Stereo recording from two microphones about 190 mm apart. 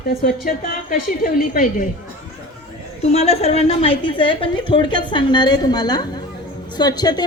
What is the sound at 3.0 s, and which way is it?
A woman's voice, 35° left (ahead or behind).